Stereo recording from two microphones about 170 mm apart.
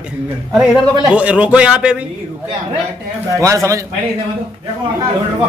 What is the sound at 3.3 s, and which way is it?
Speech, 15° right (ahead or behind).